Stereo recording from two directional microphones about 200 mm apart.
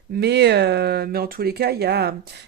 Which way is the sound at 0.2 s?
55° right (ahead or behind).